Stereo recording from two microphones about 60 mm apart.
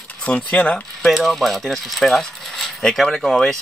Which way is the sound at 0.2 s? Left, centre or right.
Left.